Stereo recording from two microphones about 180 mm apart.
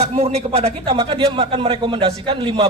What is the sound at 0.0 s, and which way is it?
A man's voice, 35° right (ahead or behind).